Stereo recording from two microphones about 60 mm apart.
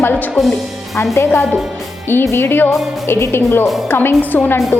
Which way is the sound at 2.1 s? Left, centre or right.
Left.